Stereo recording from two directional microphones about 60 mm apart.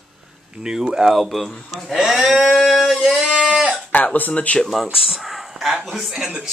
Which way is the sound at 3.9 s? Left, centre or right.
Left.